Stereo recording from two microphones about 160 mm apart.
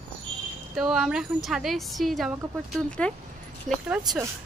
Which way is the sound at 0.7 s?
Centre (ahead or behind).